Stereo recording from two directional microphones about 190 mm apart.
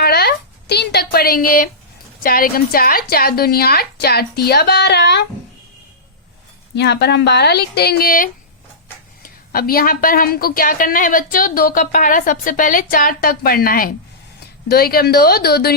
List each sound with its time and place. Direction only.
0.0 s a sound: 55° left (ahead or behind)
2.2 s a woman's voice: 50° left (ahead or behind)
6.7 s a woman's voice: 65° left (ahead or behind)